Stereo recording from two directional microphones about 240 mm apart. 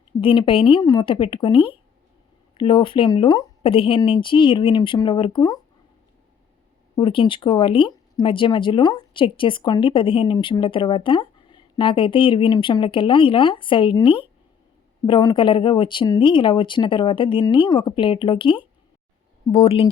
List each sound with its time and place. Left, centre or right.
0.2 s speech: left
6.9 s speech: left